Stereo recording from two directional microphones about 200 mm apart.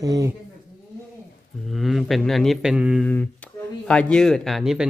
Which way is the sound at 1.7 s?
Centre (ahead or behind).